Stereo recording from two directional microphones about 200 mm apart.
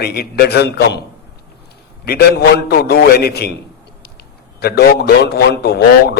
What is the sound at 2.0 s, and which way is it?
A man's voice, 50° left (ahead or behind).